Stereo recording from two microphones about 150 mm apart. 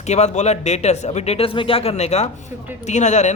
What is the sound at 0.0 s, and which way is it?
A man's voice, 50° left (ahead or behind).